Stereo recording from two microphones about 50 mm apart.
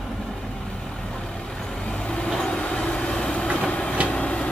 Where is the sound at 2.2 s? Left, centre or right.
Centre.